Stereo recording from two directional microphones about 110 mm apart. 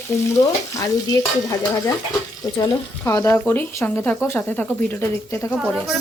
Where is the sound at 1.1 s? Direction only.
30° left (ahead or behind).